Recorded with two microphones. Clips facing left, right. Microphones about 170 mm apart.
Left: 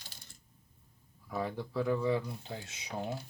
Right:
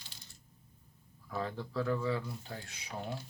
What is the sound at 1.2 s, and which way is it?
Speech, 10° left (ahead or behind).